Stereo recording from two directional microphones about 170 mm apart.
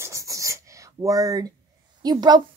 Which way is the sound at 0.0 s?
20° right (ahead or behind).